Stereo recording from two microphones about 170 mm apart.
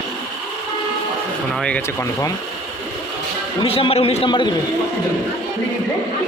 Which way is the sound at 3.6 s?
35° left (ahead or behind).